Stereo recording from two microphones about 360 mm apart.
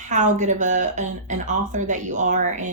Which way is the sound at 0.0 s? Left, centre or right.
Centre.